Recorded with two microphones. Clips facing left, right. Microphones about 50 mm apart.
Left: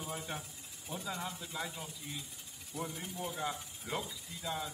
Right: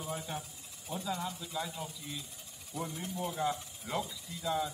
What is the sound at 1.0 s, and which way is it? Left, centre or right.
Speech, centre.